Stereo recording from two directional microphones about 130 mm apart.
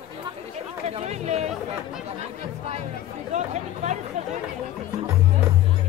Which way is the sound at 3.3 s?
65° right (ahead or behind).